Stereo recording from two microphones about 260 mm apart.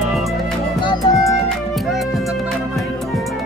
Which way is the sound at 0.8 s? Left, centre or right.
Centre.